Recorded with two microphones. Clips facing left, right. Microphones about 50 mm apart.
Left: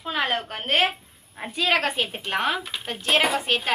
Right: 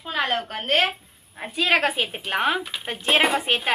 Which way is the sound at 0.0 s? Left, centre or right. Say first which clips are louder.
Right 1 dB; centre.